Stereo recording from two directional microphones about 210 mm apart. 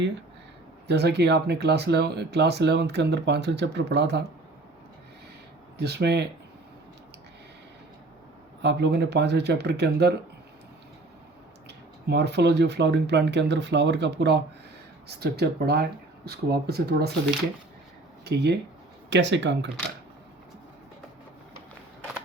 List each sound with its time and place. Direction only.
0.9 s speech: 50° right (ahead or behind)
5.7 s speech: 50° right (ahead or behind)
8.6 s speech: 55° right (ahead or behind)
12.0 s speech: 50° right (ahead or behind)
18.3 s speech: 50° right (ahead or behind)